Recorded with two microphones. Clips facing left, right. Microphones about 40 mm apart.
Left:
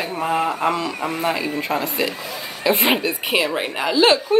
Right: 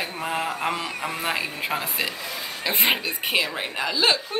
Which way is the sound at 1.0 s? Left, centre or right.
Centre.